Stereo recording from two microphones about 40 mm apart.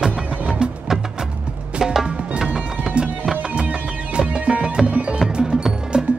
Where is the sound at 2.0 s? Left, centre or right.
Right.